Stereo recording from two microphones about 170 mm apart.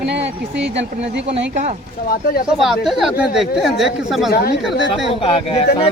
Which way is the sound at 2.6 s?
Centre (ahead or behind).